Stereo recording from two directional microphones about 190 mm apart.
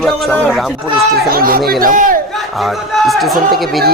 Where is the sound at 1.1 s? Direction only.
50° right (ahead or behind).